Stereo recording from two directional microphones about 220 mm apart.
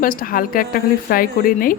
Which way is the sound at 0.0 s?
40° left (ahead or behind).